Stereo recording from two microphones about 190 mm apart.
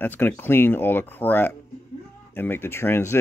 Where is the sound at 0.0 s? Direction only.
10° left (ahead or behind).